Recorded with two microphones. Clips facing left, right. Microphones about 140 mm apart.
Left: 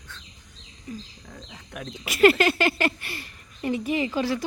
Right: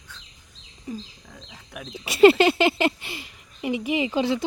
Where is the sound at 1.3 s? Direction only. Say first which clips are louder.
Left 1 dB; centre (ahead or behind).